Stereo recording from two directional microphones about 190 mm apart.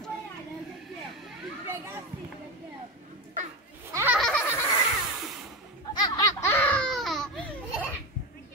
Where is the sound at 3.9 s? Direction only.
15° right (ahead or behind).